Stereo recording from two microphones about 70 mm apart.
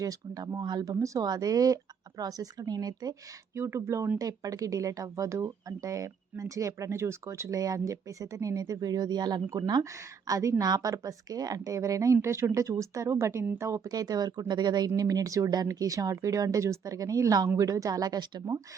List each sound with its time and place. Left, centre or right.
0.0 s speech: right
1.2 s speech: right
3.5 s speech: right
4.2 s speech: right
10.2 s speech: right
12.1 s speech: right
13.8 s speech: right